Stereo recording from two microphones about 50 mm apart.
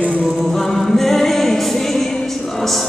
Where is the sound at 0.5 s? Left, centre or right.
Centre.